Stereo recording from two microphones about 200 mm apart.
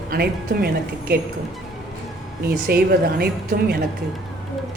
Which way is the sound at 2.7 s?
50° right (ahead or behind).